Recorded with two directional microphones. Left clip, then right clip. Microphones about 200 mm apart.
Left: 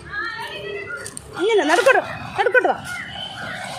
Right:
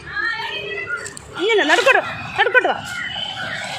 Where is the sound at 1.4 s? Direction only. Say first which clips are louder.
Right 1 dB; 15° left (ahead or behind).